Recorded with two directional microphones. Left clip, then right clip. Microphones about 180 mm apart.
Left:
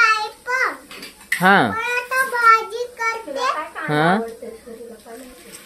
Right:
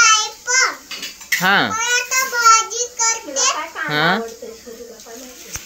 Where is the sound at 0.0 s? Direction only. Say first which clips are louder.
Right 3 dB; 30° left (ahead or behind).